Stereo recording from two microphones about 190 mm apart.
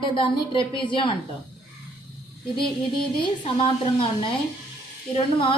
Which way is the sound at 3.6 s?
25° left (ahead or behind).